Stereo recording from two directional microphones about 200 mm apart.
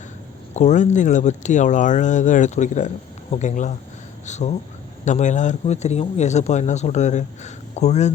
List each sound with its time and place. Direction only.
0.5 s speech: 35° left (ahead or behind)